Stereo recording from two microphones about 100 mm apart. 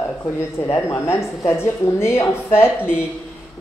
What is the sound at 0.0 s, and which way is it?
Speech, 25° left (ahead or behind).